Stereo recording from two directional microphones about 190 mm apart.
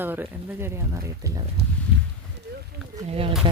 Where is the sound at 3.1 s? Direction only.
30° right (ahead or behind).